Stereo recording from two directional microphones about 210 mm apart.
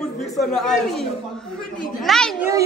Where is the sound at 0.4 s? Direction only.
Centre (ahead or behind).